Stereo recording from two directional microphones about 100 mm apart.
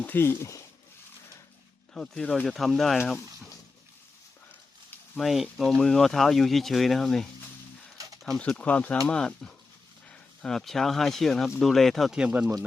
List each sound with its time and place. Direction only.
0.0 s speech: 20° left (ahead or behind)
1.9 s speech: 5° left (ahead or behind)
5.1 s speech: centre (ahead or behind)
8.4 s speech: 10° left (ahead or behind); by 12.5 s 10° right (ahead or behind)